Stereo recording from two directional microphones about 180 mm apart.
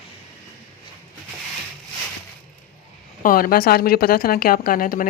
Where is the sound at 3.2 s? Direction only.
50° left (ahead or behind).